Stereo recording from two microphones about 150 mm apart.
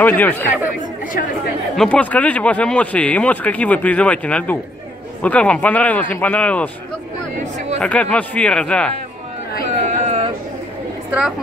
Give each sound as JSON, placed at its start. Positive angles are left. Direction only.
{"t": 0.0, "sound": "speech", "side_deg": 10}
{"t": 1.8, "sound": "speech", "side_deg": 10}
{"t": 7.8, "sound": "speech", "side_deg": 10}
{"t": 9.8, "sound": "a sound", "side_deg": -45}
{"t": 11.1, "sound": "a woman's voice", "side_deg": -5}